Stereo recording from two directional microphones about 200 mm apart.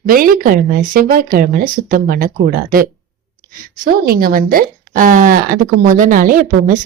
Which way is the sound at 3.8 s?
45° right (ahead or behind).